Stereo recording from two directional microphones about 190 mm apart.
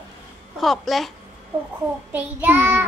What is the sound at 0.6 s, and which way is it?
Speech, centre (ahead or behind).